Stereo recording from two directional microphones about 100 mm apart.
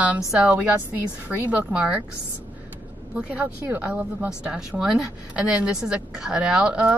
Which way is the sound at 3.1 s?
15° right (ahead or behind).